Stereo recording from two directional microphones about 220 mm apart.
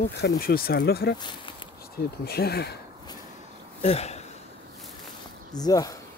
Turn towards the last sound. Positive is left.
turn(degrees=15)  # may be behind; listen again after turning